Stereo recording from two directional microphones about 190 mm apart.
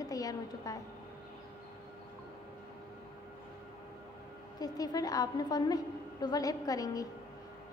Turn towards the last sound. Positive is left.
turn(degrees=20)  # may be behind; listen again after turning